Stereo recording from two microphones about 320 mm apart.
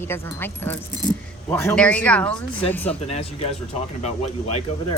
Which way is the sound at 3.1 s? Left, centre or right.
Centre.